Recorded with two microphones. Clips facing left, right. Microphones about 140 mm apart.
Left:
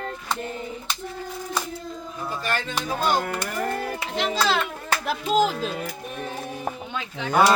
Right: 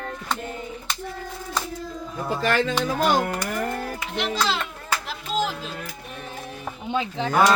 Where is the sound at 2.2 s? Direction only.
90° right.